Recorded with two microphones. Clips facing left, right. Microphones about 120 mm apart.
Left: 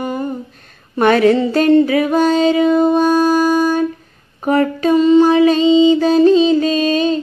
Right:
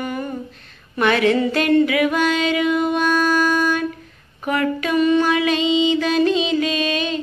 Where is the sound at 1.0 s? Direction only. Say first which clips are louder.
Left 6 dB; 40° left (ahead or behind).